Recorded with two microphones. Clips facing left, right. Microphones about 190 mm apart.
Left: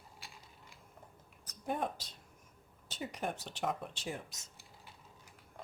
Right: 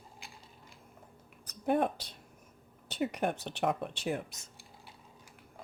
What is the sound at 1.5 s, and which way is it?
Speech, 65° right (ahead or behind).